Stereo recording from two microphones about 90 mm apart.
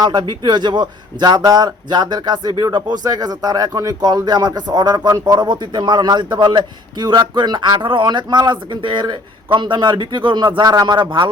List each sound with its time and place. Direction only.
0.0 s a man's voice: 55° right (ahead or behind)